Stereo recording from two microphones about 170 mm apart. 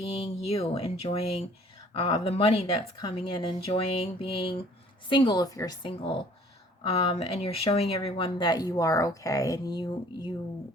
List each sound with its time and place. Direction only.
0.1 s a woman's voice: 35° left (ahead or behind)